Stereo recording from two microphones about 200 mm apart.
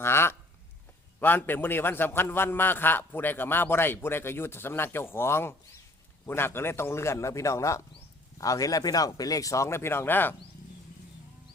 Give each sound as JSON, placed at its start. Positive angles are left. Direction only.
{"t": 0.0, "sound": "a man's voice", "side_deg": 10}